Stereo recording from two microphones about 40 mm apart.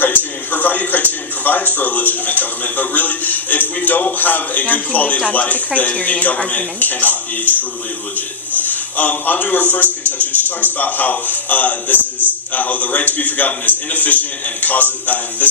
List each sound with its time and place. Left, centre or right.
0.0 s a sound: left
4.2 s a man's voice: left
8.6 s a man's voice: left